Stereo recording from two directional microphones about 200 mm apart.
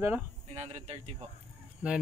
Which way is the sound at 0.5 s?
35° right (ahead or behind).